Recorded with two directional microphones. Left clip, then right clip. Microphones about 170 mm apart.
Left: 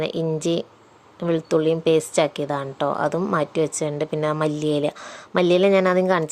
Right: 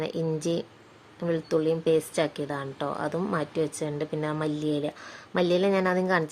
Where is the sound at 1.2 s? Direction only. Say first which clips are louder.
Left 6 dB; 25° left (ahead or behind).